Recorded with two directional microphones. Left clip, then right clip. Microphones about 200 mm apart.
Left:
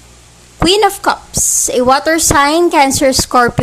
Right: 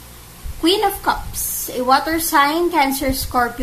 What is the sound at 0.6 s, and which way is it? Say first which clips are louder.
A woman's voice: left 6 dB; 40° left (ahead or behind).